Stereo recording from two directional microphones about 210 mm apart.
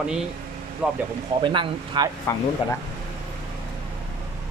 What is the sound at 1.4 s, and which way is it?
Speech, 25° right (ahead or behind).